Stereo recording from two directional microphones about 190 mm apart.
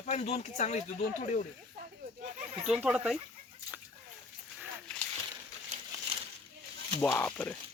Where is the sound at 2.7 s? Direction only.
5° right (ahead or behind).